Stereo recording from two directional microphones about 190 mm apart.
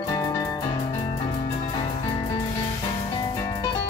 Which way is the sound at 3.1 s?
20° left (ahead or behind).